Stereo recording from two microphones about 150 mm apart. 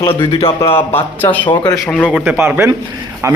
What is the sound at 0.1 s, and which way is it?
Speech, 40° left (ahead or behind).